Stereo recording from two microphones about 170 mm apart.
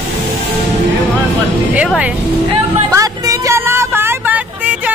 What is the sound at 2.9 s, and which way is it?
Vehicle, 20° right (ahead or behind).